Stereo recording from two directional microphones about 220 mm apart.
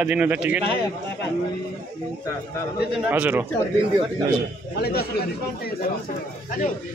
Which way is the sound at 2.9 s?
5° right (ahead or behind).